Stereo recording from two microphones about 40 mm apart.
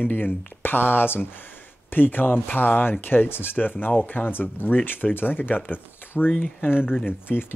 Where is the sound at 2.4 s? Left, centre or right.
Left.